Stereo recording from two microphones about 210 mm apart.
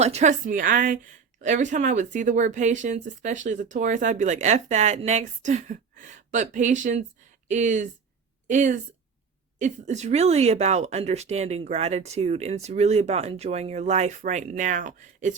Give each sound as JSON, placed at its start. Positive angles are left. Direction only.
{"t": 0.0, "sound": "speech", "side_deg": -30}